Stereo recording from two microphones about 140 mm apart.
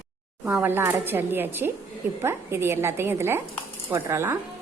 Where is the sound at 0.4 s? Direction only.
15° right (ahead or behind).